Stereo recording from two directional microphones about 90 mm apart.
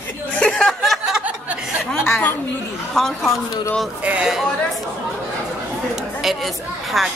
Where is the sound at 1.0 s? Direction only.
15° right (ahead or behind).